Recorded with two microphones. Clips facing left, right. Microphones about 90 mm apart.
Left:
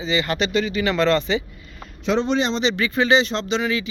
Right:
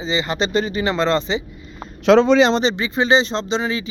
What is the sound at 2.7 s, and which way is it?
Speech, 25° right (ahead or behind).